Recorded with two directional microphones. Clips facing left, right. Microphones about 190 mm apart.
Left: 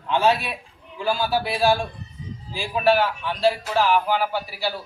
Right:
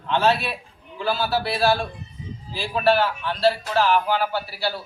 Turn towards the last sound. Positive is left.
turn(degrees=10)  # may be behind; listen again after turning